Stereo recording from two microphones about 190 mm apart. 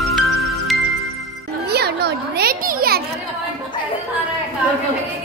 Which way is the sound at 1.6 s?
60° right (ahead or behind).